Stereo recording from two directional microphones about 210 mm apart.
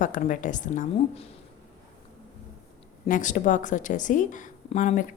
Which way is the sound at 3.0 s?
40° left (ahead or behind).